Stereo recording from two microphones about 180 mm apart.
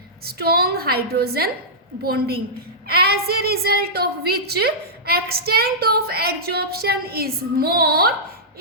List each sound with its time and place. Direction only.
0.3 s a woman's voice: 60° right (ahead or behind)